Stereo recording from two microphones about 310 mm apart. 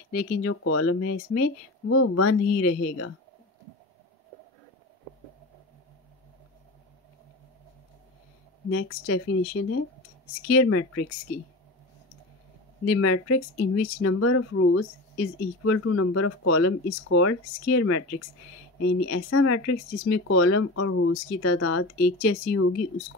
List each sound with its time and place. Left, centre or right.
0.1 s speech: left
8.6 s speech: left
12.8 s speech: left